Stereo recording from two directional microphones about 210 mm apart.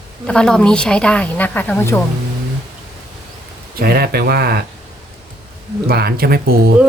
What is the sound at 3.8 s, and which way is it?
Speech, 45° right (ahead or behind).